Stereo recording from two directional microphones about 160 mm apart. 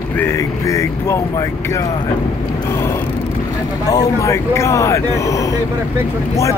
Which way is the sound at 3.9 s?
20° left (ahead or behind).